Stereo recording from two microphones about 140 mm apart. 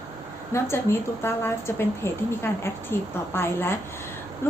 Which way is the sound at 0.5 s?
20° left (ahead or behind).